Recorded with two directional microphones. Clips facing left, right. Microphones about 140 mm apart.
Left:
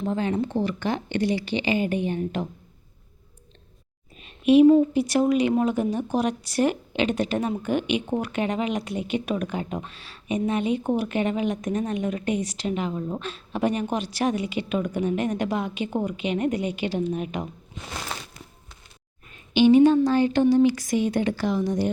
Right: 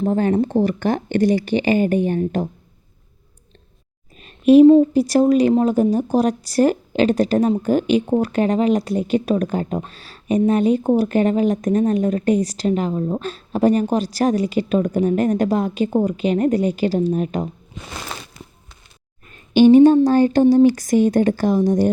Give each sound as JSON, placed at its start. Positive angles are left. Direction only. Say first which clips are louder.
{"t": 0.0, "sound": "speech", "louder": "right 7 dB", "side_deg": -45}
{"t": 4.2, "sound": "a sound", "louder": "right 6 dB", "side_deg": -40}
{"t": 4.6, "sound": "a woman's voice", "louder": "right 6 dB", "side_deg": -30}
{"t": 19.3, "sound": "speech", "louder": "right 6 dB", "side_deg": -45}